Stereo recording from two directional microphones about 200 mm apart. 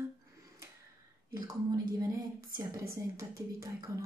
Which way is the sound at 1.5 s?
15° right (ahead or behind).